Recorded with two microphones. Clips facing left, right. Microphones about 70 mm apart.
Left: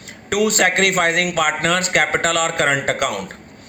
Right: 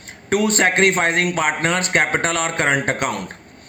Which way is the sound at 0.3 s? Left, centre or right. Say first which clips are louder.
Even; right.